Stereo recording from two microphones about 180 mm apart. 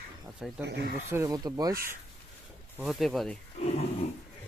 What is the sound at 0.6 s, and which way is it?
Speech, 70° right (ahead or behind).